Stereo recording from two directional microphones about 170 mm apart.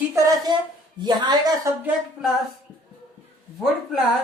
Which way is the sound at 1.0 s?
25° right (ahead or behind).